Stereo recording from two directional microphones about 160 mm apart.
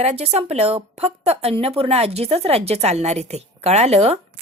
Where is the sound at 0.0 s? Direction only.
40° right (ahead or behind).